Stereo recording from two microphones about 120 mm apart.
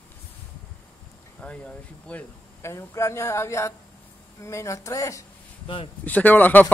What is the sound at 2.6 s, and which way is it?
Speech, 25° left (ahead or behind).